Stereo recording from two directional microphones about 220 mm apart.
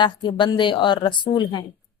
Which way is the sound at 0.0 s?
20° left (ahead or behind).